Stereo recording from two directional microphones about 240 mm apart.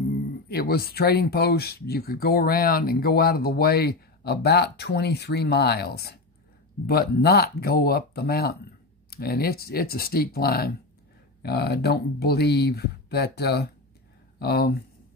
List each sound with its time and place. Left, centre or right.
0.5 s speech: left